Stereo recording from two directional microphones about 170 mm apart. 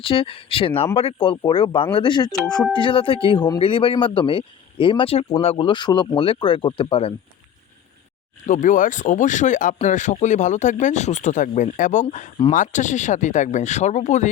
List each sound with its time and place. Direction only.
0.0 s speech: 30° left (ahead or behind)
8.4 s speech: 50° left (ahead or behind)